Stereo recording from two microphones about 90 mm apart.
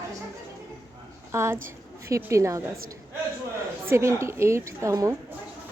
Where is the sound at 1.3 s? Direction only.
30° right (ahead or behind).